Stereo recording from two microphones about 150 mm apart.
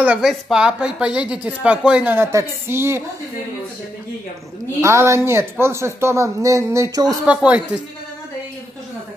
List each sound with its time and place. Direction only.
0.0 s speech: 10° right (ahead or behind)
4.8 s speech: 20° right (ahead or behind)
7.2 s speech: 10° right (ahead or behind)